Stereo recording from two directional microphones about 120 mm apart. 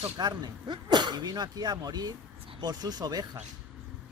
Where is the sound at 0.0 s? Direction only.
35° right (ahead or behind).